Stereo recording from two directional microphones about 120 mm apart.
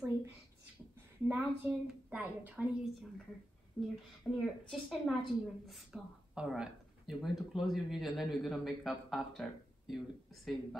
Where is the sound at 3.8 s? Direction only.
5° left (ahead or behind).